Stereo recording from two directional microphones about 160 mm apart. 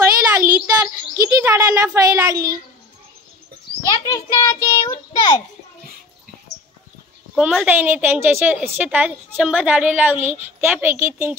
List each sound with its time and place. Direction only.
0.0 s a sound: 15° right (ahead or behind)
1.1 s a child's voice: 20° right (ahead or behind)
3.8 s a child's voice: 20° left (ahead or behind)
7.3 s a woman's voice: 5° right (ahead or behind)